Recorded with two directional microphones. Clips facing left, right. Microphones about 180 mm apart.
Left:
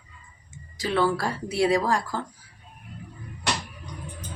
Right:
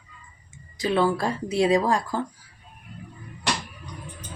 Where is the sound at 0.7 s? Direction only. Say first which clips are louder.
Right 2 dB; 20° right (ahead or behind).